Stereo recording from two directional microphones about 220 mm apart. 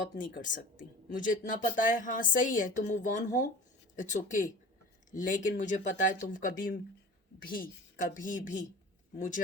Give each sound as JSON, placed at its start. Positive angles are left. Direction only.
{"t": 0.2, "sound": "speech", "side_deg": 35}
{"t": 7.5, "sound": "speech", "side_deg": 40}